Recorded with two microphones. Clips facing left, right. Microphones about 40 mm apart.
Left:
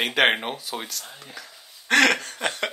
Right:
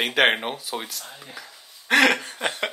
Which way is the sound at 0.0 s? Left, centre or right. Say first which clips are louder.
Right 1 dB; centre.